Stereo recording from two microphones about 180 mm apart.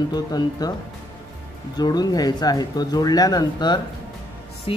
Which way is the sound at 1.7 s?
20° left (ahead or behind).